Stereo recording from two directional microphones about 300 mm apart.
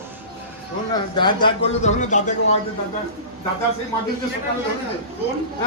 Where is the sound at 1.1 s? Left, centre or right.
Centre.